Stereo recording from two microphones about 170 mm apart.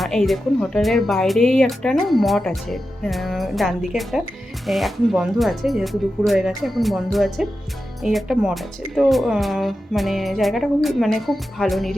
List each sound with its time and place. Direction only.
0.0 s speech: centre (ahead or behind)